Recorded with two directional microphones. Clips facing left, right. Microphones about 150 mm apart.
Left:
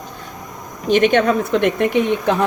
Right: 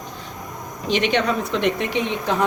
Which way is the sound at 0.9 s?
50° left (ahead or behind).